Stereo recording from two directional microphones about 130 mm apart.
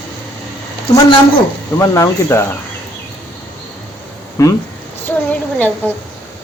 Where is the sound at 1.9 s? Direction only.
25° left (ahead or behind).